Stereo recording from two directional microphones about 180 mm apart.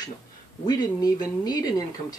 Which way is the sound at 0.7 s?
20° left (ahead or behind).